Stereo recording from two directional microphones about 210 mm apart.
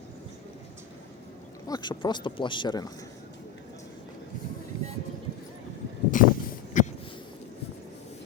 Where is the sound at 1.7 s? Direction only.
20° left (ahead or behind).